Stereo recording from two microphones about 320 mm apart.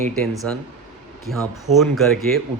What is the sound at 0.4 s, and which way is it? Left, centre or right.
Speech, centre.